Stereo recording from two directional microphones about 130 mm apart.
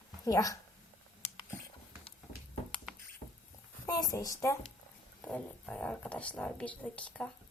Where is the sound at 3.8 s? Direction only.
25° left (ahead or behind).